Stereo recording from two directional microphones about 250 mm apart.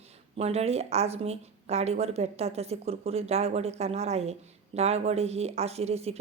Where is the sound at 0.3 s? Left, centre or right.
Right.